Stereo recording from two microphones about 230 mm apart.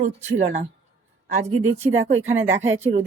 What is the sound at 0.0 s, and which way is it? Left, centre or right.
Speech, right.